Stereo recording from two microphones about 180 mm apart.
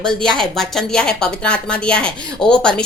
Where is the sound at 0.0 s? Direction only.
5° left (ahead or behind).